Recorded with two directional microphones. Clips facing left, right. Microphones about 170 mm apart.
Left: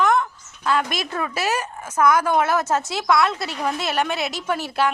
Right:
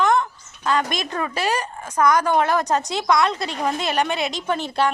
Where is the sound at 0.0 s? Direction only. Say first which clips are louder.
Even; centre (ahead or behind).